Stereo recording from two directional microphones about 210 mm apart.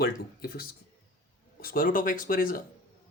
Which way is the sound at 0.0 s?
45° left (ahead or behind).